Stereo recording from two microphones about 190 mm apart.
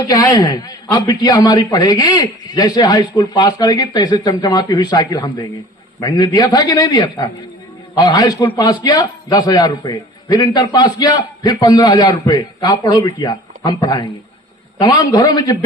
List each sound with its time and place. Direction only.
0.0 s a man's voice: 20° left (ahead or behind)